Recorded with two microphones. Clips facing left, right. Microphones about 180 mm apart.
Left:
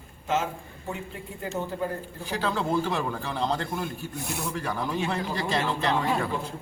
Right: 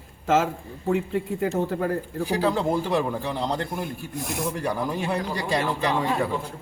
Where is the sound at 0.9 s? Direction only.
65° right (ahead or behind).